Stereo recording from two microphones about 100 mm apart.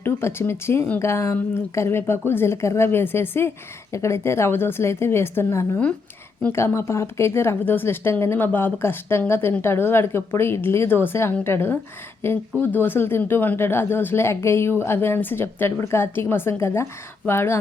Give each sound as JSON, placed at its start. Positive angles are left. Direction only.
{"t": 0.0, "sound": "speech", "side_deg": 25}